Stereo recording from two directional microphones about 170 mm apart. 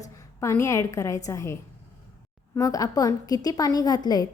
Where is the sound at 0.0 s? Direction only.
20° left (ahead or behind).